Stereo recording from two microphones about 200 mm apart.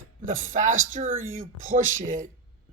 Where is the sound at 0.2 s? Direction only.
40° right (ahead or behind).